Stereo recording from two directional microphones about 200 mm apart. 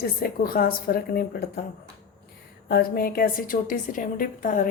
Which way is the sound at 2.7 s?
50° left (ahead or behind).